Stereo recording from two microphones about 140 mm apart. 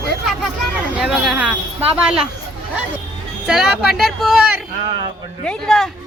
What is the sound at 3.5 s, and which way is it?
Speech, 5° right (ahead or behind).